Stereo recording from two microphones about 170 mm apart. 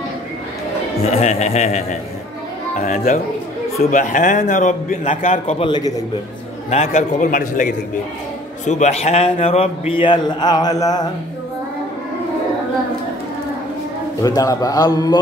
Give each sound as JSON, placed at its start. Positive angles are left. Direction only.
{"t": 1.0, "sound": "a man's voice", "side_deg": 40}
{"t": 5.6, "sound": "a man's voice", "side_deg": 25}
{"t": 6.7, "sound": "a man's voice", "side_deg": 40}
{"t": 14.2, "sound": "a man's voice", "side_deg": 20}